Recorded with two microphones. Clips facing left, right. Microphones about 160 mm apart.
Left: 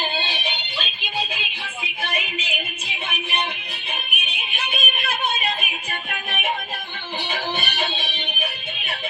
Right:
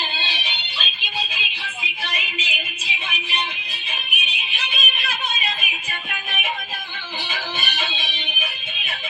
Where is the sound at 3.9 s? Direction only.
55° left (ahead or behind).